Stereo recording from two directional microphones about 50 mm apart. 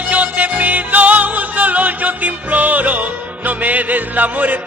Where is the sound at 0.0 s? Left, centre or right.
Right.